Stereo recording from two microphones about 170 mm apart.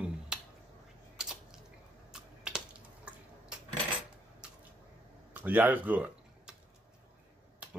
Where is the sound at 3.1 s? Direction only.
5° right (ahead or behind).